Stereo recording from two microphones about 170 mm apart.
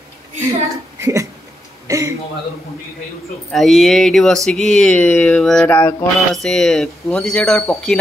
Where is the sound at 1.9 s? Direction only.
20° right (ahead or behind).